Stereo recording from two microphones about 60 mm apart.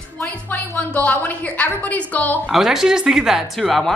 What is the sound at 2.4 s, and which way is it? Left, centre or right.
Speech, centre.